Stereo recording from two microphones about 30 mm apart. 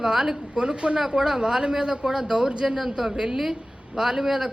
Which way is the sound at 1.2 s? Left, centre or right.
Centre.